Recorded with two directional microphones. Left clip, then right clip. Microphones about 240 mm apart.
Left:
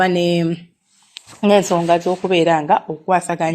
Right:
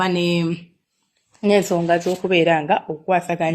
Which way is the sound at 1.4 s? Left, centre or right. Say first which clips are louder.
Left 3 dB; left.